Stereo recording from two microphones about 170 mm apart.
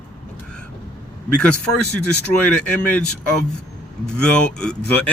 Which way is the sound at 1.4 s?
5° left (ahead or behind).